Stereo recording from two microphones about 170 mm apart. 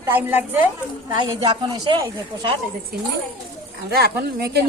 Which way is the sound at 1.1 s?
25° right (ahead or behind).